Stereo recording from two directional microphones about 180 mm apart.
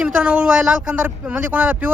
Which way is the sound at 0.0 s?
5° right (ahead or behind).